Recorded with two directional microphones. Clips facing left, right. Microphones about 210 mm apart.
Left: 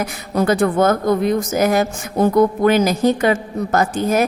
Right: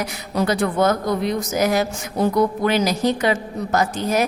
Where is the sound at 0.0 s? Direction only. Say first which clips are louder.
Left 3 dB; 50° left (ahead or behind).